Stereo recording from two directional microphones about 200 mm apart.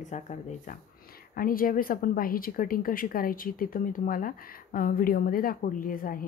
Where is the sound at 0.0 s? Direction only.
35° left (ahead or behind).